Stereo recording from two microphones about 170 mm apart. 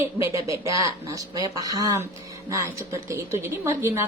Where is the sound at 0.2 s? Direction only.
20° right (ahead or behind).